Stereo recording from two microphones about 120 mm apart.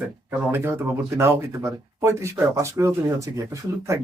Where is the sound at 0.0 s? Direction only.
15° right (ahead or behind).